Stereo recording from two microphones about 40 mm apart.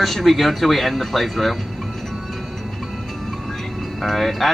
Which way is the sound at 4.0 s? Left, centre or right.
Centre.